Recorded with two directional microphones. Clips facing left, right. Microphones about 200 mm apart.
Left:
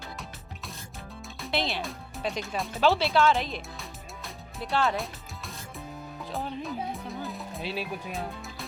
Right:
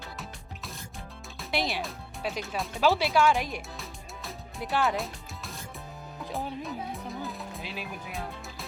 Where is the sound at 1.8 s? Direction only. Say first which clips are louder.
Left 1 dB; centre (ahead or behind).